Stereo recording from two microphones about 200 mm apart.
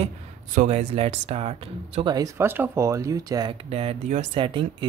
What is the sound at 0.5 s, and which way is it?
Speech, 35° right (ahead or behind).